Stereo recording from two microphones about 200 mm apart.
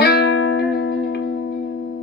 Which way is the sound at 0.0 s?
55° left (ahead or behind).